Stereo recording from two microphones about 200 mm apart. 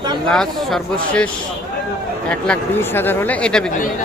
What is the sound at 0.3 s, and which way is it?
Speech, 5° left (ahead or behind).